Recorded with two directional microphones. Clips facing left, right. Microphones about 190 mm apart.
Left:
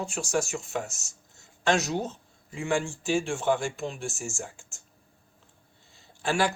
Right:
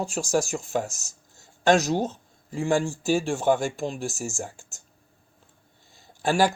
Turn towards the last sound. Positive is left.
turn(degrees=-40)  # may be behind; listen again after turning